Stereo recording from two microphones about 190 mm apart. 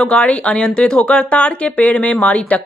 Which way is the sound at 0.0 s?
5° left (ahead or behind).